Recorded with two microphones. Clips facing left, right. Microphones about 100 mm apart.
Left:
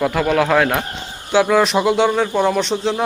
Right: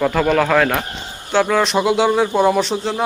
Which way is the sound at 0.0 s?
10° left (ahead or behind).